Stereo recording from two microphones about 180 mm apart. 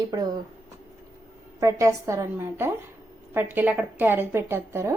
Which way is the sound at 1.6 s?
15° right (ahead or behind).